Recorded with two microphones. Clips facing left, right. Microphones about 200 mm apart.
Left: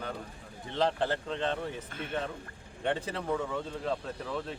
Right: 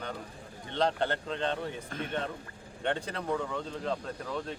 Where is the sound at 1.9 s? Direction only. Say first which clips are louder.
Right 2 dB; 40° right (ahead or behind).